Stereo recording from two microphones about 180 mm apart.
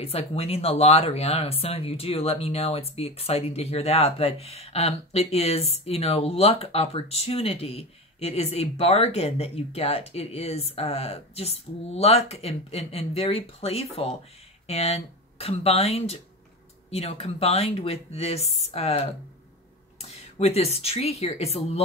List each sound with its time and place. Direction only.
0.0 s speech: 35° left (ahead or behind)
20.1 s speech: 35° left (ahead or behind)